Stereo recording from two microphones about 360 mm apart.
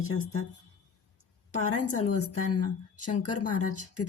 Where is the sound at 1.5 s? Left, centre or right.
Left.